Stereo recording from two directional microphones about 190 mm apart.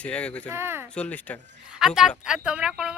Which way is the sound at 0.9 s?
5° left (ahead or behind).